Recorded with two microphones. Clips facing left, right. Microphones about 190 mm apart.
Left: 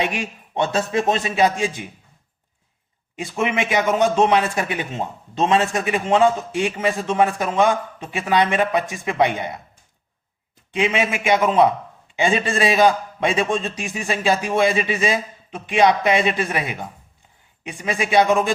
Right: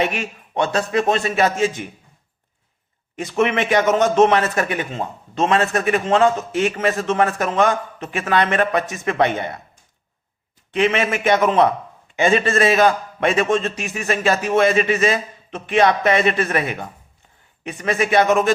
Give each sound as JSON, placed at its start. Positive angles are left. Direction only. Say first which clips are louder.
{"t": 0.0, "sound": "a man's voice", "louder": "right 2 dB", "side_deg": 15}
{"t": 3.2, "sound": "a man's voice", "louder": "right 3 dB", "side_deg": 10}
{"t": 10.7, "sound": "a man's voice", "louder": "right 2 dB", "side_deg": 10}